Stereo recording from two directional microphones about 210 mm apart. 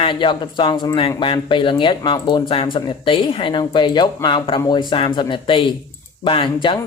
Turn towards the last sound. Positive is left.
turn(degrees=25)  # may be behind; listen again after turning